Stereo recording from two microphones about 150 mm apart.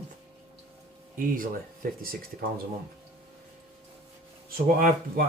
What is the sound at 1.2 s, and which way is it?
Speech, 65° right (ahead or behind).